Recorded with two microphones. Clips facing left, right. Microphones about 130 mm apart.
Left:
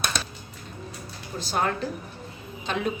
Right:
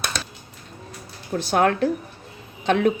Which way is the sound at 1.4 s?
65° right (ahead or behind).